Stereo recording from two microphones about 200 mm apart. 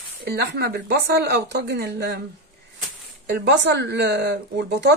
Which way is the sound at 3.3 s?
60° right (ahead or behind).